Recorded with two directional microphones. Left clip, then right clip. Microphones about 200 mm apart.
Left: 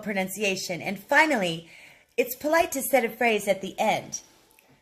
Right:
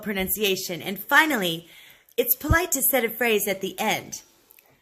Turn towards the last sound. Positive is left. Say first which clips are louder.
# left 1 dB
turn(degrees=-45)  # may be behind; listen again after turning